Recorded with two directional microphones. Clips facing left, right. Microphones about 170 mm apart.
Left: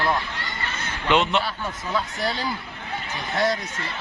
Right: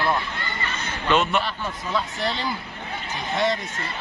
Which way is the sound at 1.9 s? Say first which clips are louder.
Even; centre (ahead or behind).